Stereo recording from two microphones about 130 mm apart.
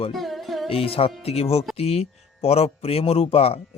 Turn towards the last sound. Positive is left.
turn(degrees=50)  # may be behind; listen again after turning